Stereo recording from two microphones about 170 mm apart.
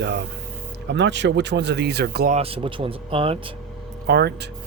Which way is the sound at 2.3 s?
35° right (ahead or behind).